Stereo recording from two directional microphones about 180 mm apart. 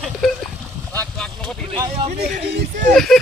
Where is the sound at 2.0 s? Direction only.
45° right (ahead or behind).